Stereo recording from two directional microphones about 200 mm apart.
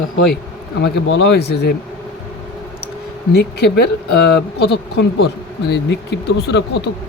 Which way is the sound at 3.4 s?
55° left (ahead or behind).